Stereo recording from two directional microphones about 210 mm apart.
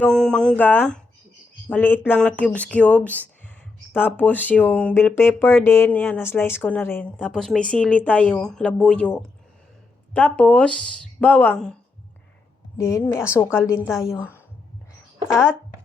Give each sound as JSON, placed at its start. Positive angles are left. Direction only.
{"t": 0.0, "sound": "speech", "side_deg": 5}
{"t": 12.7, "sound": "speech", "side_deg": 15}
{"t": 15.3, "sound": "speech", "side_deg": -5}